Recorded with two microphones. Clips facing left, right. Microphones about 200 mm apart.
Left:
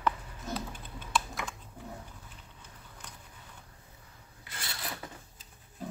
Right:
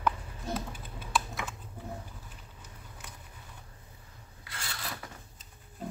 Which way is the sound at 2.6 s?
5° right (ahead or behind).